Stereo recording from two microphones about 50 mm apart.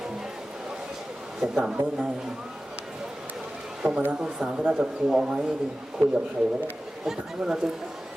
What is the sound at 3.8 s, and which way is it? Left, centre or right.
Speech, right.